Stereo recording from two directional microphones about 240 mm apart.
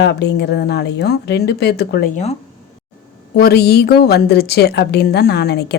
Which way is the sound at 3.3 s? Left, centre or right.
Left.